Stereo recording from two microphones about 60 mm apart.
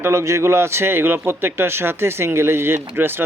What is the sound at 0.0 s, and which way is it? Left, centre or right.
A man's voice, right.